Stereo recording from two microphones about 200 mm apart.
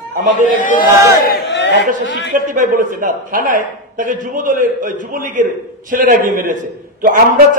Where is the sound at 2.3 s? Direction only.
40° right (ahead or behind).